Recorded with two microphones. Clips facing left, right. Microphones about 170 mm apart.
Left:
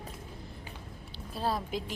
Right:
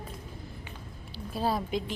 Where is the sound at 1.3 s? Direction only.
Centre (ahead or behind).